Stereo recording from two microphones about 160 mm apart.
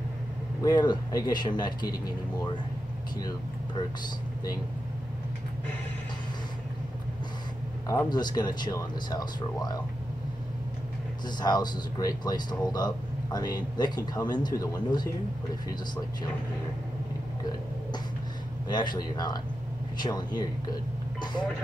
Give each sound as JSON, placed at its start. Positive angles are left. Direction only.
{"t": 0.6, "sound": "speech", "side_deg": 25}
{"t": 8.1, "sound": "speech", "side_deg": 25}
{"t": 11.2, "sound": "speech", "side_deg": 25}
{"t": 18.7, "sound": "speech", "side_deg": 25}